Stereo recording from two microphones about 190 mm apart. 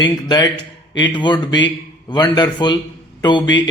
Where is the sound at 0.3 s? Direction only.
20° left (ahead or behind).